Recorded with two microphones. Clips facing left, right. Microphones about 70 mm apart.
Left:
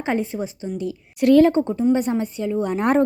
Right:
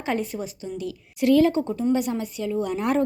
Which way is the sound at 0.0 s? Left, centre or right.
Left.